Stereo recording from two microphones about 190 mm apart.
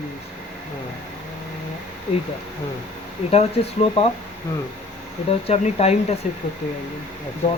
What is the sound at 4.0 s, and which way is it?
Speech, 30° left (ahead or behind).